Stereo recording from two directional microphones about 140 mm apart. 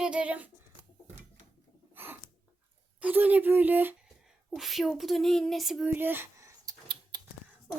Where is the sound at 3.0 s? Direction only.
10° right (ahead or behind).